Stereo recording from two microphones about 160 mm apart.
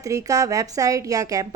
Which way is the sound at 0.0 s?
20° right (ahead or behind).